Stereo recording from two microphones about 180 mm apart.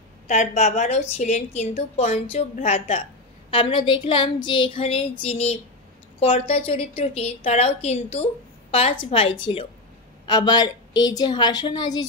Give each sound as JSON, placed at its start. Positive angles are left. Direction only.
{"t": 0.3, "sound": "a woman's voice", "side_deg": 40}